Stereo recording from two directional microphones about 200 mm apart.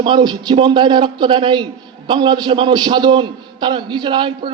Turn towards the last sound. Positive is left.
turn(degrees=-25)  # may be behind; listen again after turning